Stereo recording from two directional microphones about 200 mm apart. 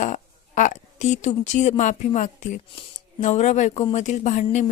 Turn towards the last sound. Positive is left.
turn(degrees=35)  # may be behind; listen again after turning